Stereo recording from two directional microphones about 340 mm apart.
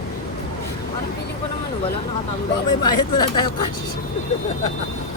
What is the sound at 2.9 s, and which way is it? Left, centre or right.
Speech, left.